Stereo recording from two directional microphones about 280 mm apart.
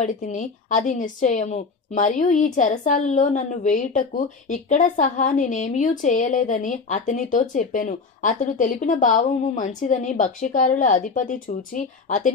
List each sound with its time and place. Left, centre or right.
0.0 s a woman's voice: left